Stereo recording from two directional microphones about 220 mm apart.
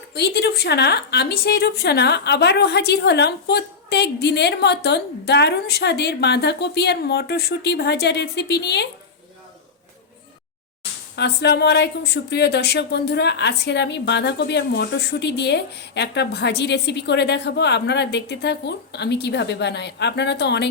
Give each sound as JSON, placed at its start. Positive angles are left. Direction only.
{"t": 0.1, "sound": "a woman's voice", "side_deg": 50}
{"t": 11.2, "sound": "a woman's voice", "side_deg": 50}